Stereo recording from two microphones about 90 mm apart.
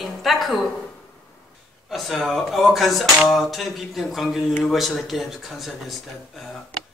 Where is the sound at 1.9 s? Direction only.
Centre (ahead or behind).